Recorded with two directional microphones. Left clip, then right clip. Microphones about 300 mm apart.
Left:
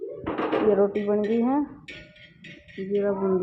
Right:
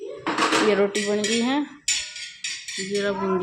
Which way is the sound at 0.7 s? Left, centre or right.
Right.